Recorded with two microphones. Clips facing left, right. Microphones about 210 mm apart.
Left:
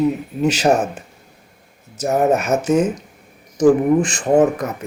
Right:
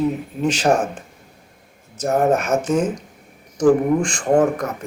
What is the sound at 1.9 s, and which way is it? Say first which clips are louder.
Speech: left 1 dB; 5° left (ahead or behind).